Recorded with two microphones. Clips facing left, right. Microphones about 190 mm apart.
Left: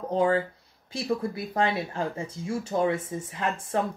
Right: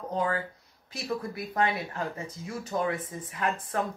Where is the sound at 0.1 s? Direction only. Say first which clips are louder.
Left 6 dB; 25° left (ahead or behind).